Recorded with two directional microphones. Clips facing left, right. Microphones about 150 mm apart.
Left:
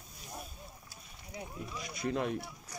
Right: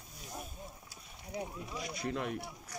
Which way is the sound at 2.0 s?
25° left (ahead or behind).